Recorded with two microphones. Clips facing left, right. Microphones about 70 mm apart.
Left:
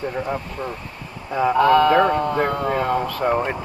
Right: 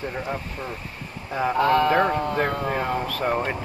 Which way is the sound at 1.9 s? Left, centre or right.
Centre.